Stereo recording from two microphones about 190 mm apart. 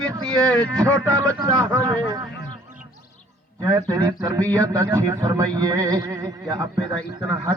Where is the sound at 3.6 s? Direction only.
20° right (ahead or behind).